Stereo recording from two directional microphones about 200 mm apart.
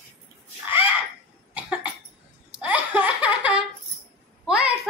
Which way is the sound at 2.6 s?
5° right (ahead or behind).